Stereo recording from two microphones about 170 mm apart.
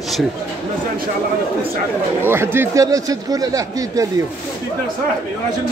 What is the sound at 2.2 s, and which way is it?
Speech, 15° right (ahead or behind).